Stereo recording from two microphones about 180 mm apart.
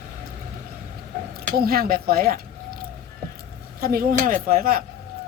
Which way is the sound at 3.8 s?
55° right (ahead or behind).